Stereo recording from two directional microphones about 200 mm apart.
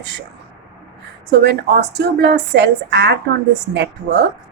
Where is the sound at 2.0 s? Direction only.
60° right (ahead or behind).